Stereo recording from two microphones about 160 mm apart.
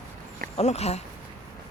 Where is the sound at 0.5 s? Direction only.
40° left (ahead or behind).